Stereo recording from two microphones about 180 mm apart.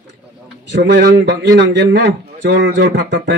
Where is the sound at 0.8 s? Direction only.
60° right (ahead or behind).